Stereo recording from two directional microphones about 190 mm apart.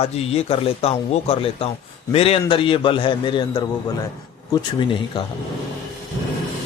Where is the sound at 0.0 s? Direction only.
30° left (ahead or behind).